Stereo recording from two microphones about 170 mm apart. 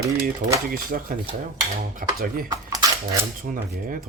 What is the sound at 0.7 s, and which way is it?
Speech, 60° right (ahead or behind).